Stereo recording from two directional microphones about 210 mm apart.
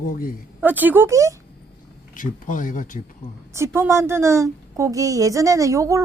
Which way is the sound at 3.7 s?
15° right (ahead or behind).